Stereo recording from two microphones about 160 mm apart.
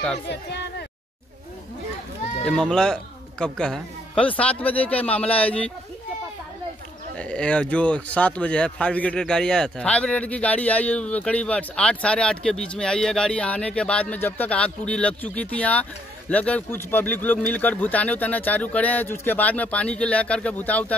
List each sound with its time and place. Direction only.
0.3 s speech: 90° left
2.4 s speech: 5° left (ahead or behind)
7.2 s speech: 5° left (ahead or behind)